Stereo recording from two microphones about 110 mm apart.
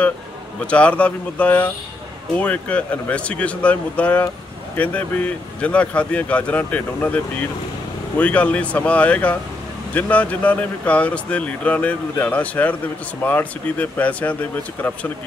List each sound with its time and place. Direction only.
0.7 s speech: 10° left (ahead or behind)